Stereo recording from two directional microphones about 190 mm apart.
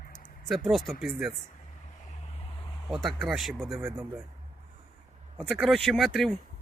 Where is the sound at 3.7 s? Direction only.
10° right (ahead or behind).